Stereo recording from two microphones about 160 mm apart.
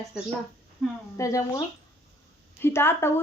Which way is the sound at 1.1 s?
20° left (ahead or behind).